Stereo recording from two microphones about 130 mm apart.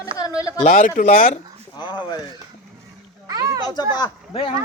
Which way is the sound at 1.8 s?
35° left (ahead or behind).